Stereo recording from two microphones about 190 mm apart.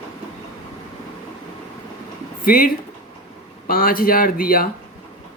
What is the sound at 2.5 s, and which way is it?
Speech, 50° left (ahead or behind).